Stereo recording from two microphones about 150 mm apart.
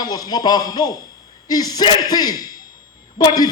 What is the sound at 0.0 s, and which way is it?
A man's voice, 25° left (ahead or behind).